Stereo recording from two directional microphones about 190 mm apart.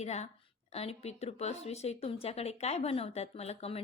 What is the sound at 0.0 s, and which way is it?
A woman's voice, 35° left (ahead or behind).